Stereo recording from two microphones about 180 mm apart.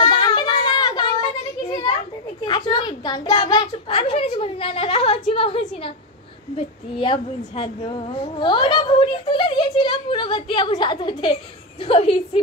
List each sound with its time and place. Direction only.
0.0 s a sound: 25° left (ahead or behind)
1.7 s children playing: 30° left (ahead or behind)
2.4 s a child's voice: 25° left (ahead or behind)